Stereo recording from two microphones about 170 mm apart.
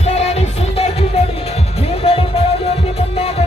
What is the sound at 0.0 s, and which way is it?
Music, 40° left (ahead or behind).